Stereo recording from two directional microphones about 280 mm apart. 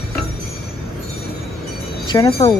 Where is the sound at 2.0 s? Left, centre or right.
Centre.